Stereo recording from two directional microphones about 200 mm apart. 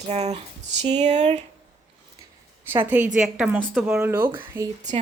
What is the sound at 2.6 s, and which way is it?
A woman's voice, 10° right (ahead or behind).